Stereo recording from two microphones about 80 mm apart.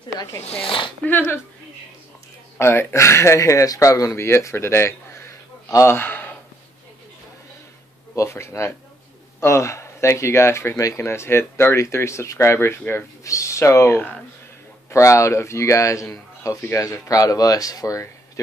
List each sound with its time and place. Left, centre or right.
0.7 s speech: left
1.0 s speech: left
2.6 s speech: left
5.9 s speech: left
8.2 s speech: left
13.2 s speech: left
13.8 s speech: left
14.9 s speech: left